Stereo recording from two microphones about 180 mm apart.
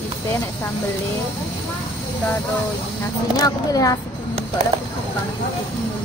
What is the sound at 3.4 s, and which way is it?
Speech, 20° left (ahead or behind).